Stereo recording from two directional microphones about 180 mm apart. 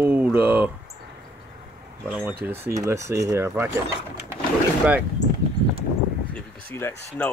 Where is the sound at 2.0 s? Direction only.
10° right (ahead or behind).